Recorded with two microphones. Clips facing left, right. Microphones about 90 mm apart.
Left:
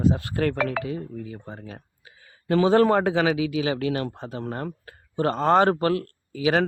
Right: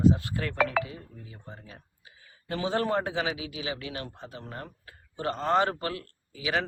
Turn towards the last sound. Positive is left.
turn(degrees=50)  # may be behind; listen again after turning